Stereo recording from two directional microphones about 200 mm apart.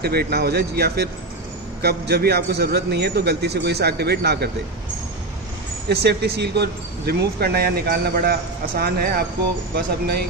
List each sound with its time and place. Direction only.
0.0 s a man's voice: 50° right (ahead or behind)
5.9 s speech: 50° right (ahead or behind)